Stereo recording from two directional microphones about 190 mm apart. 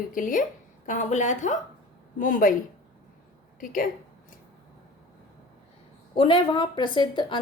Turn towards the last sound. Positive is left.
turn(degrees=25)  # may be behind; listen again after turning